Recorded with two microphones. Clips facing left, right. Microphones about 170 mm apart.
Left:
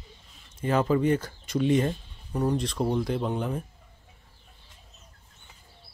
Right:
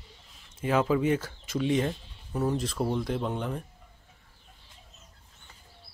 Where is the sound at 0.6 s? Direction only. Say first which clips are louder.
Left 1 dB; 5° right (ahead or behind).